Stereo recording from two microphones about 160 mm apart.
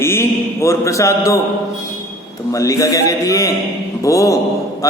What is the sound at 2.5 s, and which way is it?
A man's voice, 20° left (ahead or behind).